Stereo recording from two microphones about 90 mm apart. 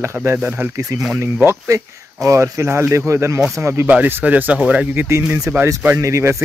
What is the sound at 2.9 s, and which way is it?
Speech, 30° right (ahead or behind).